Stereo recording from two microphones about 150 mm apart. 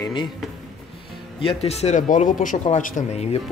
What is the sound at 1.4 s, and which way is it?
Speech, 40° left (ahead or behind).